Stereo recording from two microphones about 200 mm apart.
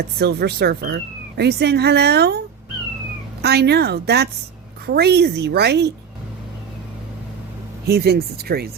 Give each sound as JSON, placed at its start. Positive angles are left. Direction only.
{"t": 0.2, "sound": "a woman's voice", "side_deg": -55}
{"t": 3.4, "sound": "a woman's voice", "side_deg": -55}
{"t": 7.9, "sound": "speech", "side_deg": -50}